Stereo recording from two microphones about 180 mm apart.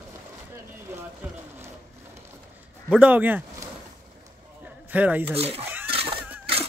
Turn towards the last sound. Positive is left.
turn(degrees=-30)  # may be behind; listen again after turning